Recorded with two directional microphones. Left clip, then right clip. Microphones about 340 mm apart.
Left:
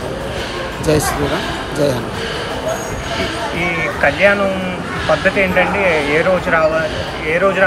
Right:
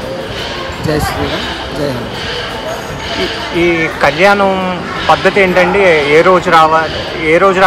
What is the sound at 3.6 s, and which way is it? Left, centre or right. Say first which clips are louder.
Speech: right 5 dB; centre.